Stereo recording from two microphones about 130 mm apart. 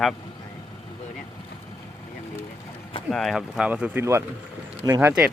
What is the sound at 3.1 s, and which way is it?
Speech, centre (ahead or behind).